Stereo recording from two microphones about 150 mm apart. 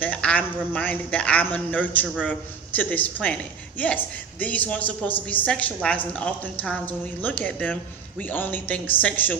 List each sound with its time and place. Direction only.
0.0 s a woman's voice: 10° left (ahead or behind)